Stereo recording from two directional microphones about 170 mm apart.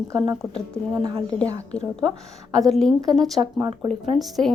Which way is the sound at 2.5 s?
5° left (ahead or behind).